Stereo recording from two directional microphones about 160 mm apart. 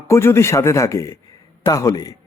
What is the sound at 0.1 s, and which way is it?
A man's voice, 15° left (ahead or behind).